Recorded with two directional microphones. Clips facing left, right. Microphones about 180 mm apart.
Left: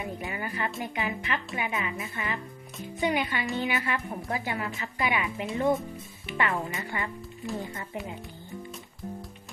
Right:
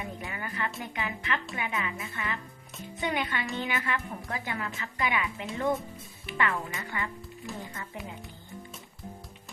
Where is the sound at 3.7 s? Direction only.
20° left (ahead or behind).